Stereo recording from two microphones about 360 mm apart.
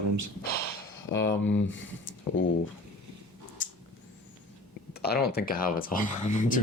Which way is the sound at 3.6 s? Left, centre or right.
Left.